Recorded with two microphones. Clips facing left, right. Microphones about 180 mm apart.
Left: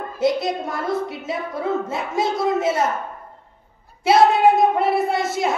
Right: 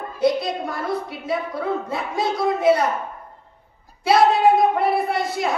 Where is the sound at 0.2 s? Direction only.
25° left (ahead or behind).